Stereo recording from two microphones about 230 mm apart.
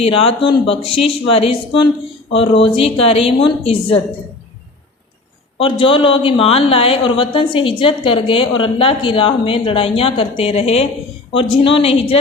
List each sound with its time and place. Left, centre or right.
0.0 s speech: left
5.5 s speech: left